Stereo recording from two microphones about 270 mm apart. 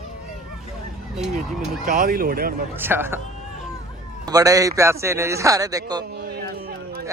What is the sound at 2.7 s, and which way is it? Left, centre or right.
Speech, centre.